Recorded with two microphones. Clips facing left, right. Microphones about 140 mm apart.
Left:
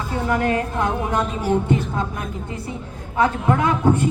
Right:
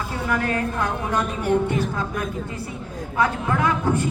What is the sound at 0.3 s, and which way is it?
Speech, 20° left (ahead or behind).